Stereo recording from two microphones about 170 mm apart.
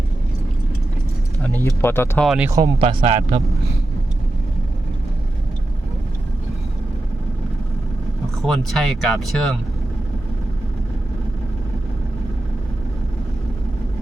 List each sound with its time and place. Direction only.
1.6 s speech: 15° left (ahead or behind)
2.2 s speech: 5° right (ahead or behind)
2.8 s a man's voice: 40° right (ahead or behind)
8.4 s speech: centre (ahead or behind)